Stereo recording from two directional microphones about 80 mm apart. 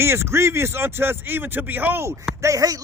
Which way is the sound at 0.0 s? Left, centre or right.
Right.